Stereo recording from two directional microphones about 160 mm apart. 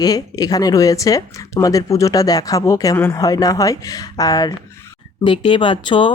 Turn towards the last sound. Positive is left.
turn(degrees=30)  # may be behind; listen again after turning